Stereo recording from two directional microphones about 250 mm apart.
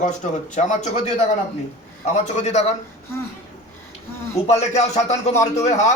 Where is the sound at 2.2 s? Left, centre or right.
Left.